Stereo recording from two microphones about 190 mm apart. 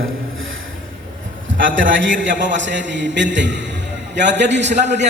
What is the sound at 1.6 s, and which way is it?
A man's voice, 80° right.